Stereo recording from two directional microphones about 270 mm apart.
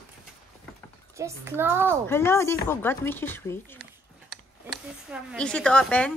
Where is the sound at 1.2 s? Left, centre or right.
Centre.